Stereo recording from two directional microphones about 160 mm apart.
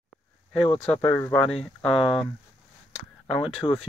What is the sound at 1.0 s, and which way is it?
Speech, 15° left (ahead or behind).